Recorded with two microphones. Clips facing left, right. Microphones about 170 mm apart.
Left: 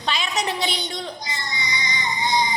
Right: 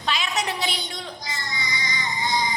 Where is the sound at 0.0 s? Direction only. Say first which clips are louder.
Left 1 dB; centre (ahead or behind).